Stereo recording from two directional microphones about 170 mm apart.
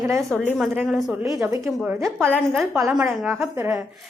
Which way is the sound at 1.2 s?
20° right (ahead or behind).